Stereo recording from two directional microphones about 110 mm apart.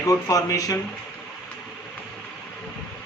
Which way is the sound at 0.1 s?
35° left (ahead or behind).